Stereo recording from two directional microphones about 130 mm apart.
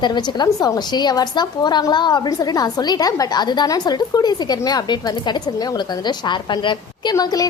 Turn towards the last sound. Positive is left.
turn(degrees=30)  # may be behind; listen again after turning